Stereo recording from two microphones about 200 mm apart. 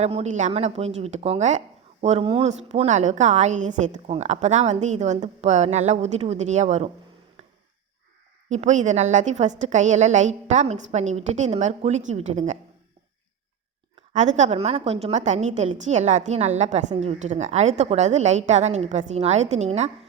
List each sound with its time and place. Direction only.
0.0 s speech: 35° right (ahead or behind)
8.4 s speech: 35° right (ahead or behind)
14.1 s speech: 35° right (ahead or behind)